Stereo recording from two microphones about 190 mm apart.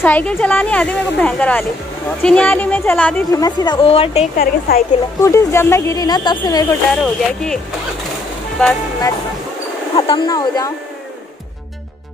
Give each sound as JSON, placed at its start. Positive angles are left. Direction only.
{"t": 0.0, "sound": "speech", "side_deg": 10}
{"t": 3.3, "sound": "a woman's voice", "side_deg": 20}
{"t": 4.4, "sound": "a woman's voice", "side_deg": 50}
{"t": 5.2, "sound": "speech", "side_deg": 15}
{"t": 7.0, "sound": "speech", "side_deg": 5}
{"t": 9.9, "sound": "a woman's voice", "side_deg": 25}